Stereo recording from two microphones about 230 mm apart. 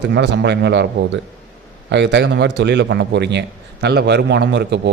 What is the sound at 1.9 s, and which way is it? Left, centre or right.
A man's voice, right.